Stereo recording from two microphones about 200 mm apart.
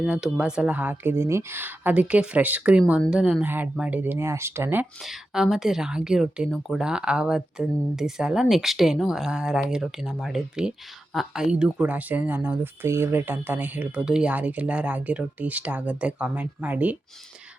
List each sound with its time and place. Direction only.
0.0 s speech: 5° right (ahead or behind)